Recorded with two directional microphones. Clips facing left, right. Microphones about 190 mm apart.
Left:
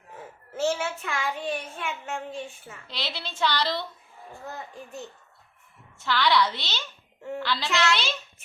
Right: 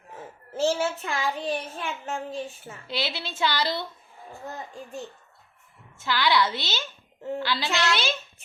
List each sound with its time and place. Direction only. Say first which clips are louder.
0.5 s a child's voice: right 2 dB; 30° right (ahead or behind)
2.8 s a woman's voice: right 4 dB; 5° right (ahead or behind)
6.0 s a woman's voice: even; centre (ahead or behind)